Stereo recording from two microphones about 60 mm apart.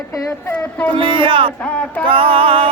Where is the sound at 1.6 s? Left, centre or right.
Left.